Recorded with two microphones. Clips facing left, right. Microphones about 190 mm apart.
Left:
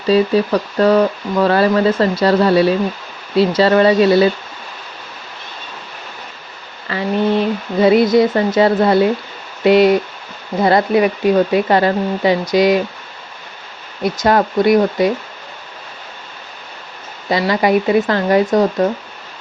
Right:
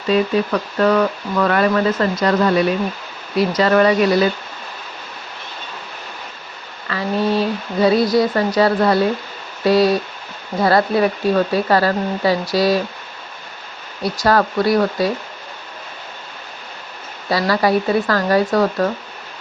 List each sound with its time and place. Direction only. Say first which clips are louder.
0.1 s speech: left 4 dB; 30° left (ahead or behind)
6.9 s speech: left 3 dB; 30° left (ahead or behind)
14.0 s speech: left 2 dB; 20° left (ahead or behind)
17.2 s speech: left 2 dB; 20° left (ahead or behind)